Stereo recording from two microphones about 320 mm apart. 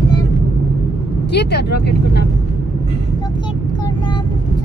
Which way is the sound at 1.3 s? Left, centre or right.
Left.